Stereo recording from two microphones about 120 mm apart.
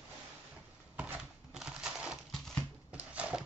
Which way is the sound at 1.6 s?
5° right (ahead or behind).